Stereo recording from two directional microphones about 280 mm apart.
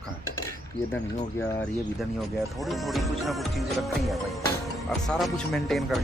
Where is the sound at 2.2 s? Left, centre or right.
Centre.